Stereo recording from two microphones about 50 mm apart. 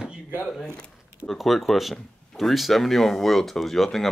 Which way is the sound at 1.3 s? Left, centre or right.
Centre.